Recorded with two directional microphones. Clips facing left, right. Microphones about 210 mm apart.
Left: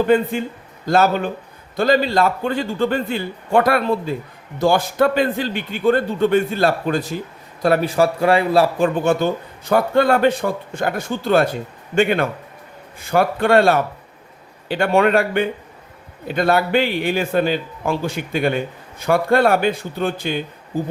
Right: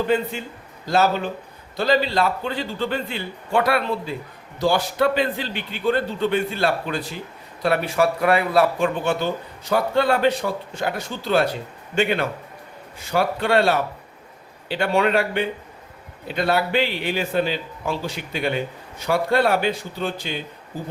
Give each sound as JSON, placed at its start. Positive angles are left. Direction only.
{"t": 0.1, "sound": "a man's voice", "side_deg": 50}
{"t": 9.0, "sound": "a man's voice", "side_deg": 45}